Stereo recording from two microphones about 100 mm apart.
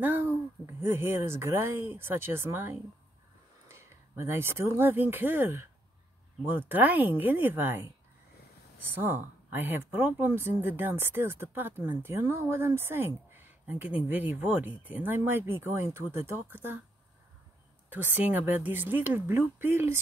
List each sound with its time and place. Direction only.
0.0 s speech: 20° right (ahead or behind)
9.0 s speech: 20° right (ahead or behind)
17.8 s speech: 20° right (ahead or behind)